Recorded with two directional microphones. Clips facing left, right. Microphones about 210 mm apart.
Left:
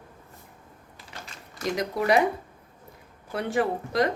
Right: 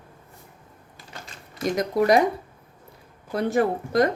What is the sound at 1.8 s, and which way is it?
Speech, 40° right (ahead or behind).